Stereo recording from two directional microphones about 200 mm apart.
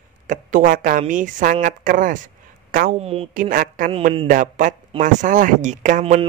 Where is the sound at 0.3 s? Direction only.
40° right (ahead or behind).